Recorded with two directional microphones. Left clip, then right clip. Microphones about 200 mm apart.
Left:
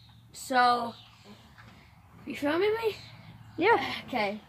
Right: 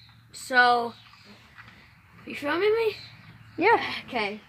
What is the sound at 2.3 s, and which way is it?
Speech, 5° right (ahead or behind).